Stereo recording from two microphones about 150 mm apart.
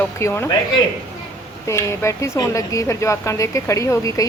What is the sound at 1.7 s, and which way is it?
Speech, 20° left (ahead or behind).